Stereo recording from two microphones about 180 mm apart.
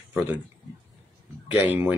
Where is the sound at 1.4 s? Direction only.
10° right (ahead or behind).